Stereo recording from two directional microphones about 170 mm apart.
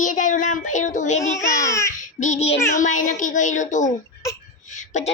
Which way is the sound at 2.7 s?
50° left (ahead or behind).